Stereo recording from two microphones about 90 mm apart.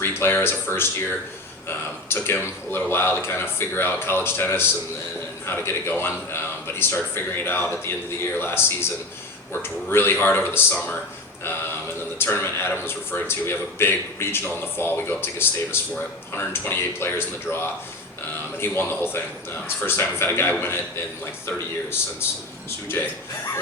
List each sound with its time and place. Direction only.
0.0 s a man's voice: 25° left (ahead or behind)
12.2 s a man's voice: 25° left (ahead or behind)